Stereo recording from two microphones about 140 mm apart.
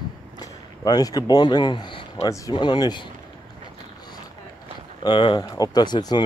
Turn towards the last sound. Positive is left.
turn(degrees=30)  # may be behind; listen again after turning